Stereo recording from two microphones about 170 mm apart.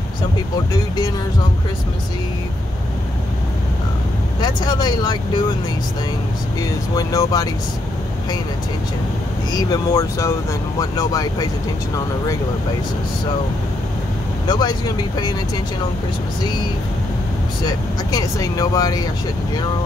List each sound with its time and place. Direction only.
4.4 s speech: 25° left (ahead or behind)
6.6 s speech: 20° left (ahead or behind)
9.5 s speech: 20° left (ahead or behind)
14.5 s speech: 25° left (ahead or behind)
17.6 s speech: 20° left (ahead or behind)